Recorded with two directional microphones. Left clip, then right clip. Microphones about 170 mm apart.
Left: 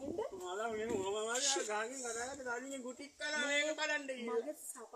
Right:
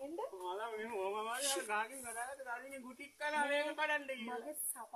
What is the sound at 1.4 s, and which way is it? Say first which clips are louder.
Speech: left 2 dB; 20° right (ahead or behind).